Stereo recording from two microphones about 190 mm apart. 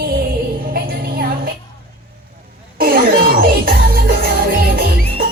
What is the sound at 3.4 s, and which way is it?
Music, 50° right (ahead or behind).